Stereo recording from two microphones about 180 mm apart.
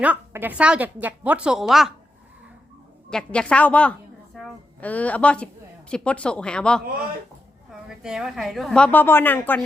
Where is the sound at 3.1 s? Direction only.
5° left (ahead or behind).